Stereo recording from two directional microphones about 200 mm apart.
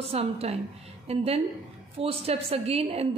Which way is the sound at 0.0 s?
30° right (ahead or behind).